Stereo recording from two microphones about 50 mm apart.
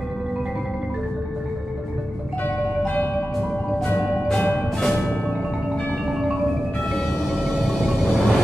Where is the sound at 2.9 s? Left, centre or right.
Left.